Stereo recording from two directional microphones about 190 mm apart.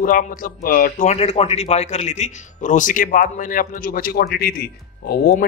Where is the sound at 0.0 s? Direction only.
45° left (ahead or behind).